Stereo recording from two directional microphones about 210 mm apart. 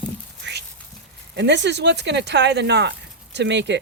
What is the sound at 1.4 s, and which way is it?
Speech, 55° right (ahead or behind).